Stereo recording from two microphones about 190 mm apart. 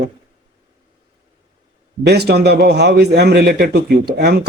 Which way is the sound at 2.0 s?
60° right (ahead or behind).